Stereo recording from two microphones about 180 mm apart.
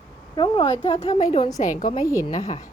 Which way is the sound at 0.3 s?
25° left (ahead or behind).